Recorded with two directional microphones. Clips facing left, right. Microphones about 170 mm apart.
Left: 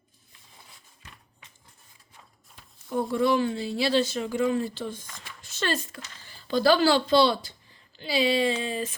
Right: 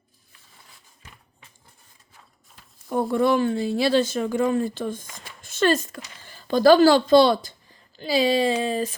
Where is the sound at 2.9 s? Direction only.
50° right (ahead or behind).